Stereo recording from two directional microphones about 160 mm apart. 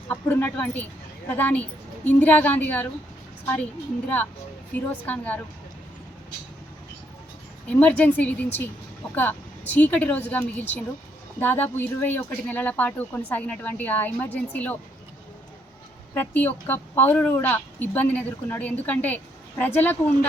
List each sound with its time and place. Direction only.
0.1 s a woman's voice: 10° left (ahead or behind)
4.7 s a woman's voice: 10° left (ahead or behind)
7.7 s a woman's voice: 10° left (ahead or behind)
16.1 s a woman's voice: 10° left (ahead or behind)